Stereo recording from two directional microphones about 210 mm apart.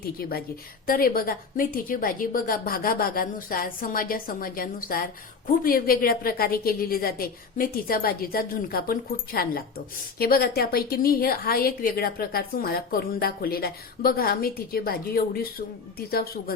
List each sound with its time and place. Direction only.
0.0 s a woman's voice: 45° left (ahead or behind)